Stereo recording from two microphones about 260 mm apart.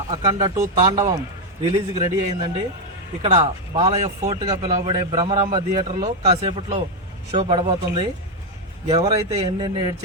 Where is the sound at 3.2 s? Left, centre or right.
Right.